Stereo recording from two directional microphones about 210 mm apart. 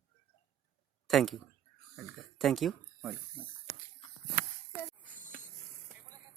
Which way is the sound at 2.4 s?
Centre (ahead or behind).